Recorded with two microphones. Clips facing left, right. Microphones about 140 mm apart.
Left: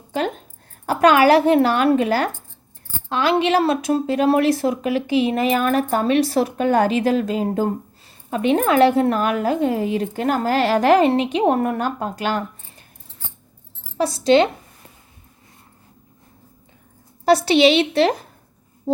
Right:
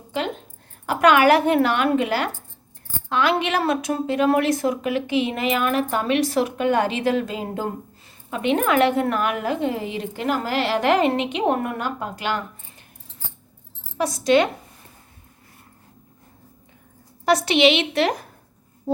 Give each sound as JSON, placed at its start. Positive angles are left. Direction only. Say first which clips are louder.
{"t": 0.9, "sound": "a woman's voice", "louder": "left 2 dB", "side_deg": 35}
{"t": 14.0, "sound": "speech", "louder": "left 3 dB", "side_deg": 30}
{"t": 17.2, "sound": "a woman's voice", "louder": "left 3 dB", "side_deg": 30}